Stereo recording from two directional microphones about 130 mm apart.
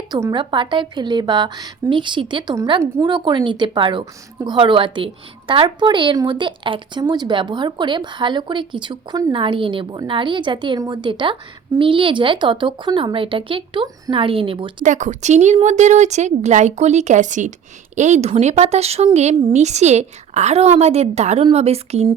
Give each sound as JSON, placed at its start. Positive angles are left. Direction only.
{"t": 0.3, "sound": "speech", "side_deg": -40}
{"t": 14.8, "sound": "speech", "side_deg": -70}